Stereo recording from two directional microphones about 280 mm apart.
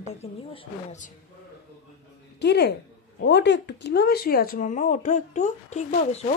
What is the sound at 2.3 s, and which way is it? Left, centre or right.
A woman's voice, left.